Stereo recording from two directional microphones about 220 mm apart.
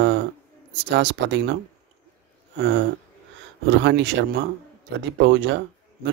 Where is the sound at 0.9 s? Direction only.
55° right (ahead or behind).